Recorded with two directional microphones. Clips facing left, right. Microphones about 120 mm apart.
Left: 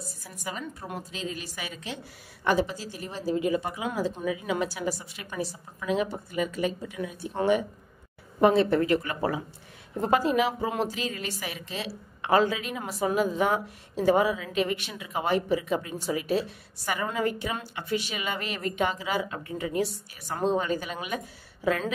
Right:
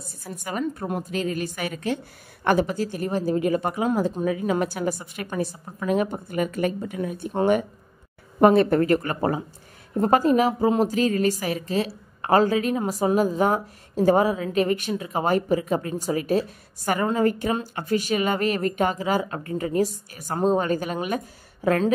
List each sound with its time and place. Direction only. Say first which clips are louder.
0.0 s a woman's voice: right 2 dB; 55° right (ahead or behind)
8.4 s a woman's voice: right 4 dB; 55° right (ahead or behind)